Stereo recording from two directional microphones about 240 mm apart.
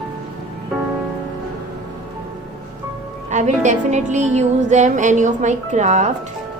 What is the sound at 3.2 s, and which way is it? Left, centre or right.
A woman's voice, right.